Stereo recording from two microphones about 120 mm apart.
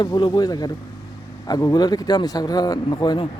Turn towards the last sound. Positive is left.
turn(degrees=35)  # may be behind; listen again after turning